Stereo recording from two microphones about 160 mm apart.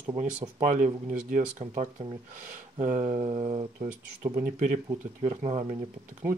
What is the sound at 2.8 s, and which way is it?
Speech, 45° right (ahead or behind).